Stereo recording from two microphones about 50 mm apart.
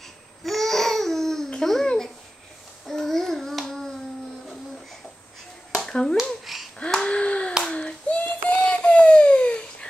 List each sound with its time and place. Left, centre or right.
0.4 s babbling: centre
2.9 s child singing: centre
5.8 s a sound: centre
6.4 s babbling: centre
6.9 s finger snapping: centre
7.2 s hands: left
8.5 s a sound: left